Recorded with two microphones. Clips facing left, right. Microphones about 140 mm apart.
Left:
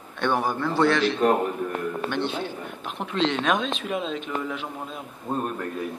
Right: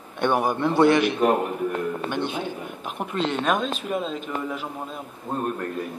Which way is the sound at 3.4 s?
5° right (ahead or behind).